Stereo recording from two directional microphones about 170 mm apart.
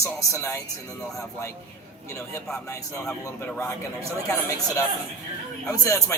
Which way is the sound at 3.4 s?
15° left (ahead or behind).